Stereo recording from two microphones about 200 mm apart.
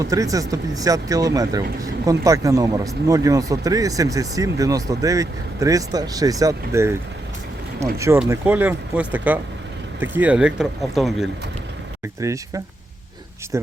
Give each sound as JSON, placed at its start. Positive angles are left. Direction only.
{"t": 0.0, "sound": "speech", "side_deg": -15}
{"t": 7.9, "sound": "speech", "side_deg": -15}
{"t": 12.2, "sound": "speech", "side_deg": -15}